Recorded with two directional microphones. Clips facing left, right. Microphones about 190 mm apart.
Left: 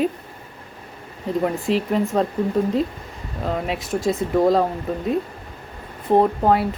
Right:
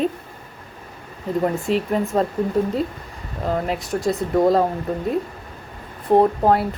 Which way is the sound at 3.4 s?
Centre (ahead or behind).